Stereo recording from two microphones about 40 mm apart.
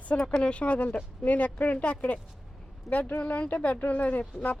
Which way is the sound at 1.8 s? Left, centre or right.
Left.